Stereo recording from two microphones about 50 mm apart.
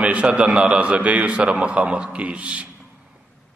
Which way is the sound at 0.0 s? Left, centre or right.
Right.